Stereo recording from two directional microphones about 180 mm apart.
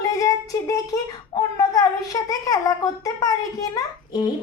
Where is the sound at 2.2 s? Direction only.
20° left (ahead or behind).